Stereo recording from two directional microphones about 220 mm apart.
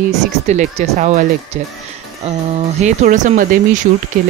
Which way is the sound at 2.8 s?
35° right (ahead or behind).